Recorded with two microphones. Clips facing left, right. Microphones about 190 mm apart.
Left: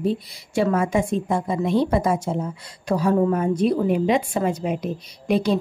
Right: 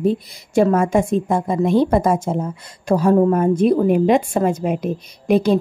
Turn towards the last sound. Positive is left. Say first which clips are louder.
# right 5 dB
turn(degrees=-50)  # may be behind; listen again after turning